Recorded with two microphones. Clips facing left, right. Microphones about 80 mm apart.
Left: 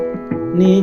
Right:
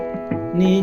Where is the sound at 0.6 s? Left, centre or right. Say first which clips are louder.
Left 5 dB; left.